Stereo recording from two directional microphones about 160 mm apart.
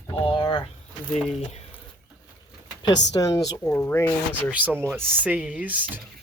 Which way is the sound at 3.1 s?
20° left (ahead or behind).